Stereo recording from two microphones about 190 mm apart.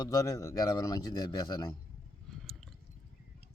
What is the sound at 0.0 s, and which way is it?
Speech, 15° left (ahead or behind).